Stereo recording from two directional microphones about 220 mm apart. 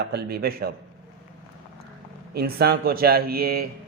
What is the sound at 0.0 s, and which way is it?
Speech, 45° right (ahead or behind).